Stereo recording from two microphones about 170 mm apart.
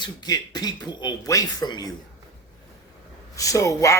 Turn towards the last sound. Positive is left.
turn(degrees=20)  # may be behind; listen again after turning